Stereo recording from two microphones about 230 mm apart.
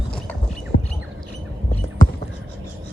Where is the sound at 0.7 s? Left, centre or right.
Left.